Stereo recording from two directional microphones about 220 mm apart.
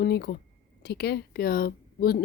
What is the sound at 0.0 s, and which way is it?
A woman's voice, 45° left (ahead or behind).